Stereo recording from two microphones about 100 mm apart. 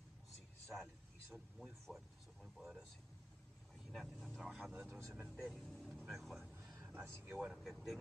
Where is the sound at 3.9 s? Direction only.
5° right (ahead or behind).